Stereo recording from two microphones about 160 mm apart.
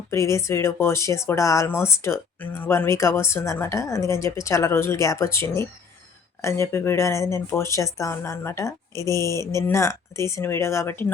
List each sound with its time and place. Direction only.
0.1 s speech: 20° left (ahead or behind)